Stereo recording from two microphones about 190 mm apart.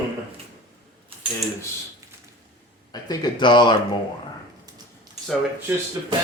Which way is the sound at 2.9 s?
20° left (ahead or behind).